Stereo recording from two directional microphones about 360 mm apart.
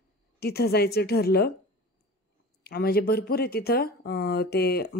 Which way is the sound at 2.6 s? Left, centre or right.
Left.